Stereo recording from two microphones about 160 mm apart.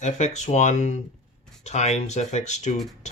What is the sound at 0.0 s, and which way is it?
Speech, 45° left (ahead or behind).